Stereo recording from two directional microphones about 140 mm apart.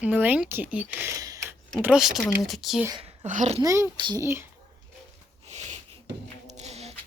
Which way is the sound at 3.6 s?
20° right (ahead or behind).